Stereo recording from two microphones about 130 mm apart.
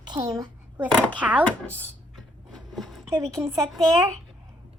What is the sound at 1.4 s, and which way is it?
Speech, 10° left (ahead or behind).